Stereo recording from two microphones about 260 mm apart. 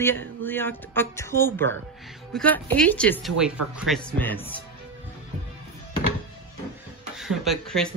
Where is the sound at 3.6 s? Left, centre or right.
Right.